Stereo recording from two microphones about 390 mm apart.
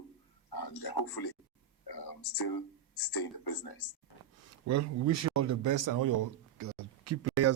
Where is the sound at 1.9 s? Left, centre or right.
Left.